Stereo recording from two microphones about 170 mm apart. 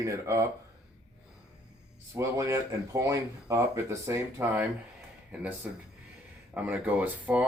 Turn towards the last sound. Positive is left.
turn(degrees=-10)  # may be behind; listen again after turning